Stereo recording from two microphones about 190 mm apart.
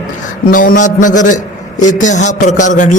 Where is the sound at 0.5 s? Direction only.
45° left (ahead or behind).